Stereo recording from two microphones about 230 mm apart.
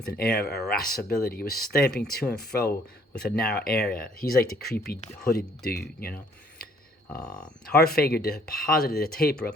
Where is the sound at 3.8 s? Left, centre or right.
Left.